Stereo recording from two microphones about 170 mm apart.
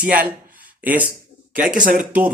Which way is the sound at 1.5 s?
50° right (ahead or behind).